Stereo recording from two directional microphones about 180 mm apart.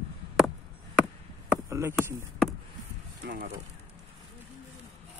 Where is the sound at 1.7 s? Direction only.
15° right (ahead or behind).